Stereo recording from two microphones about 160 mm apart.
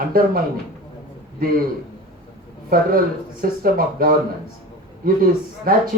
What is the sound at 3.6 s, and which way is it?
Speech, 65° right (ahead or behind).